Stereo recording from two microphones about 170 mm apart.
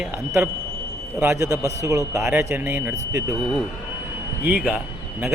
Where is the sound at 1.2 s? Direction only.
15° right (ahead or behind).